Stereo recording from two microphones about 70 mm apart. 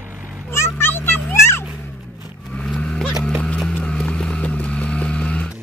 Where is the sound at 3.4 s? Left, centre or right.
Centre.